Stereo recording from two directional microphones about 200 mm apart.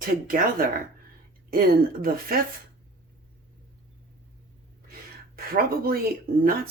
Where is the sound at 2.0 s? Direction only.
45° right (ahead or behind).